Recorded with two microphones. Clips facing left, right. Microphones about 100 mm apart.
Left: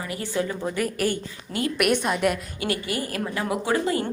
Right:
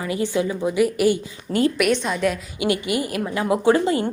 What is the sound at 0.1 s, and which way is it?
A woman's voice, 20° right (ahead or behind).